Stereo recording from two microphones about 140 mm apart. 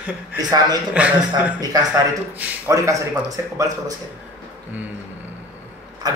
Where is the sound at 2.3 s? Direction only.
10° right (ahead or behind).